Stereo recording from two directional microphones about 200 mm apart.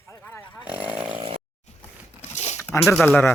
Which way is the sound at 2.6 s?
15° left (ahead or behind).